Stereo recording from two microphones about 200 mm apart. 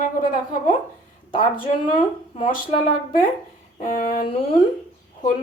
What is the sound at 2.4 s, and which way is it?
Speech, 40° left (ahead or behind).